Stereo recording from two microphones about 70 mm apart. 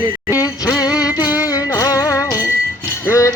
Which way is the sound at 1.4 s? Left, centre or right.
Left.